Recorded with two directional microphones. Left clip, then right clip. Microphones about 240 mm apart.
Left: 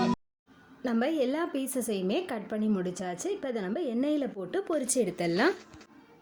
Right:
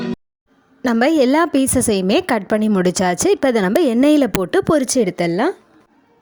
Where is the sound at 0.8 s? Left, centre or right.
Right.